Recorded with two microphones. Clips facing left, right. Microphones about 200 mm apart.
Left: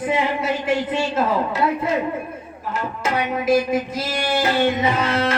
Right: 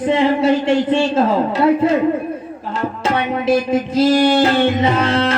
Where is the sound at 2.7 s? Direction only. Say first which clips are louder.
Right 4 dB; 30° right (ahead or behind).